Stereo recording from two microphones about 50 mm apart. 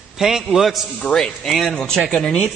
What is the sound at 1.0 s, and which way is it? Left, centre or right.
Speech, centre.